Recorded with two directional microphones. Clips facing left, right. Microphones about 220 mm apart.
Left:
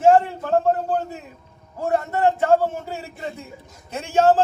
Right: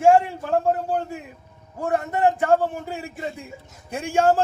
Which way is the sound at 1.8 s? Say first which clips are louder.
Left 1 dB; 15° right (ahead or behind).